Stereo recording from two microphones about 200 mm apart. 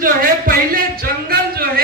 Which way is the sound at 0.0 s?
45° right (ahead or behind).